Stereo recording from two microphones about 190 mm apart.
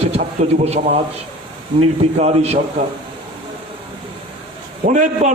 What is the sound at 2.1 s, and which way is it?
Speech, 35° right (ahead or behind).